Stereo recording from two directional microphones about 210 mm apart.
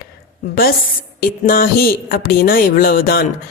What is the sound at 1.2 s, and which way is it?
Speech, 45° left (ahead or behind).